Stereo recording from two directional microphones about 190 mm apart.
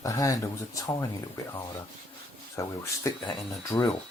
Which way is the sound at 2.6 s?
15° left (ahead or behind).